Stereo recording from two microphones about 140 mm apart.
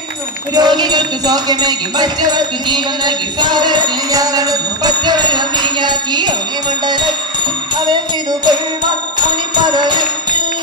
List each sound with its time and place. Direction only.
0.6 s music: 30° right (ahead or behind)
7.7 s music: 30° right (ahead or behind)
9.7 s music: 30° right (ahead or behind)